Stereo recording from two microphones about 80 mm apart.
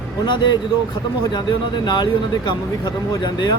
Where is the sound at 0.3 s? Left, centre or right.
Left.